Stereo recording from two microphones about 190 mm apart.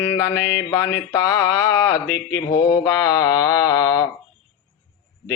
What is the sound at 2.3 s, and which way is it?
Speech, 20° left (ahead or behind).